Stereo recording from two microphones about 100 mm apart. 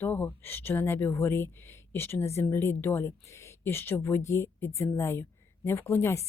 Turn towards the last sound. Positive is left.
turn(degrees=25)  # may be behind; listen again after turning